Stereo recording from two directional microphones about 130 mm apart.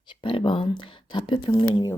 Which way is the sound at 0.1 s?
40° left (ahead or behind).